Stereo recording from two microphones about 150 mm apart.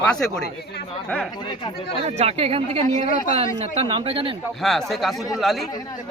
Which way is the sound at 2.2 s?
40° right (ahead or behind).